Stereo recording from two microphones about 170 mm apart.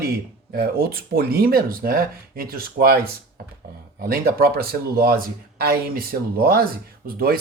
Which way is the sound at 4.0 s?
65° right (ahead or behind).